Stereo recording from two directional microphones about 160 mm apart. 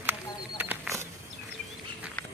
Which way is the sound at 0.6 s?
15° right (ahead or behind).